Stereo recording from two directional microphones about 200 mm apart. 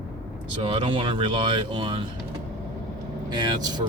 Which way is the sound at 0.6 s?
25° right (ahead or behind).